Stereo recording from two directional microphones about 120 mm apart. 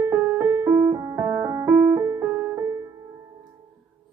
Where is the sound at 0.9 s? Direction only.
20° right (ahead or behind).